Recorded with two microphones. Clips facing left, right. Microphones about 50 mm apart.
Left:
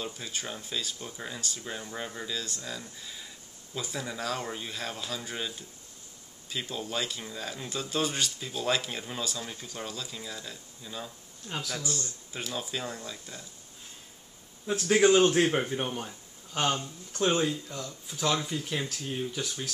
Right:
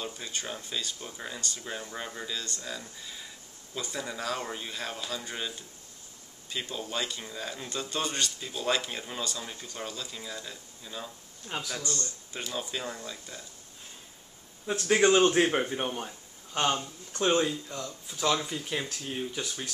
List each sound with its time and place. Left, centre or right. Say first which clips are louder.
0.0 s speech: even; centre
6.5 s speech: left 1 dB; centre
14.8 s speech: left 1 dB; centre